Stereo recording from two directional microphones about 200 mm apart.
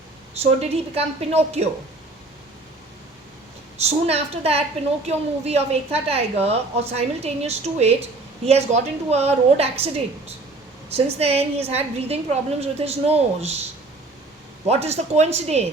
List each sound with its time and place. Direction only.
0.6 s a woman's voice: 30° right (ahead or behind)
3.8 s a woman's voice: 30° right (ahead or behind)
14.7 s a woman's voice: 30° right (ahead or behind)